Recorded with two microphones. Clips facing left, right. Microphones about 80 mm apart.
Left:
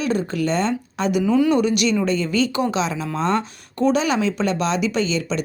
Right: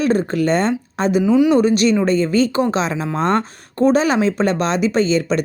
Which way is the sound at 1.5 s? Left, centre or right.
Right.